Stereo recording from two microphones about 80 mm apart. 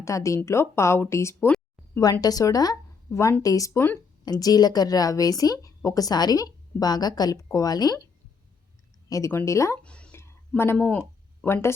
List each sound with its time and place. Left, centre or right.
0.0 s a woman's voice: left
2.2 s a woman's voice: left
3.1 s a woman's voice: left
9.0 s a woman's voice: left
9.8 s a sound: centre
10.8 s speech: centre
11.4 s a woman's voice: left